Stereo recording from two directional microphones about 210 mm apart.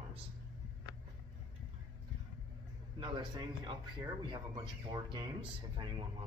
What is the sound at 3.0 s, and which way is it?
Speech, 20° right (ahead or behind).